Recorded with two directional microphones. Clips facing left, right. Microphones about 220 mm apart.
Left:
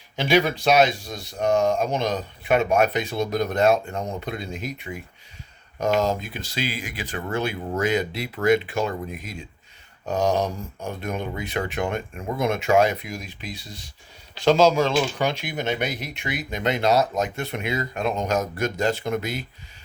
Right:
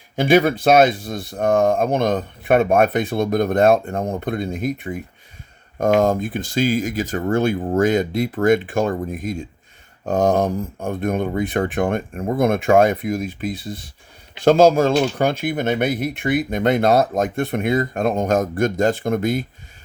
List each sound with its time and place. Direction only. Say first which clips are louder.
0.2 s speech: right 5 dB; 50° right (ahead or behind)